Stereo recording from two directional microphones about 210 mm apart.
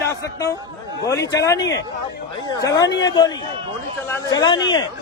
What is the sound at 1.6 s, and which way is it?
Speech, 60° left (ahead or behind).